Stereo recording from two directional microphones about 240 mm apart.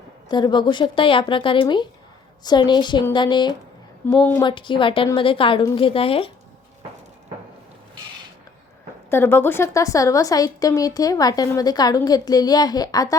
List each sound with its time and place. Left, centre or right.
0.3 s a woman's voice: centre
4.0 s a woman's voice: centre
4.4 s a woman's voice: left
9.0 s a woman's voice: centre